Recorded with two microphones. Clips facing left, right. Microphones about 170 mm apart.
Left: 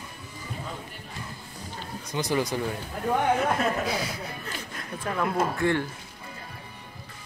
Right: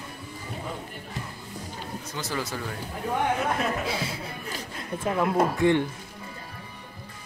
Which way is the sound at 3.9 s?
25° right (ahead or behind).